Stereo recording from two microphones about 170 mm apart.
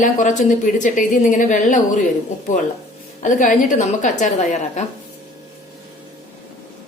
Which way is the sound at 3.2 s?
50° left (ahead or behind).